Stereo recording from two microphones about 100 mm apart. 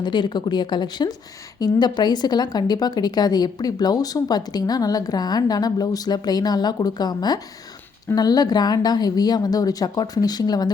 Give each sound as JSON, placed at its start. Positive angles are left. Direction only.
{"t": 0.0, "sound": "a woman's voice", "side_deg": 50}